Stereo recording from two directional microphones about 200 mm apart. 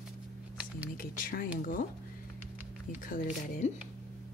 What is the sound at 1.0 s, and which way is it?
Speech, 45° left (ahead or behind).